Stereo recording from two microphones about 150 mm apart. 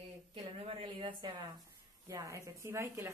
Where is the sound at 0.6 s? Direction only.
35° right (ahead or behind).